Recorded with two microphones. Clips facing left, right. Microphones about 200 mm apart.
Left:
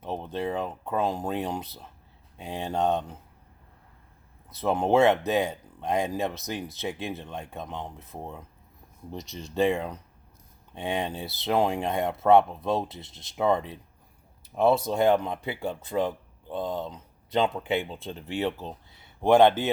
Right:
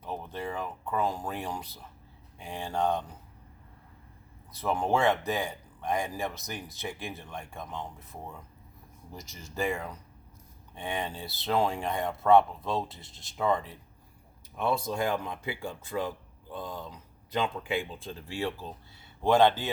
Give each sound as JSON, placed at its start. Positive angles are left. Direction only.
{"t": 0.0, "sound": "speech", "side_deg": 25}
{"t": 4.6, "sound": "speech", "side_deg": 20}
{"t": 9.6, "sound": "speech", "side_deg": 25}